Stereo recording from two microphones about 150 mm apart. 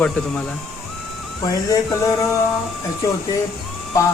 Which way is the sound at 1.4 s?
25° left (ahead or behind).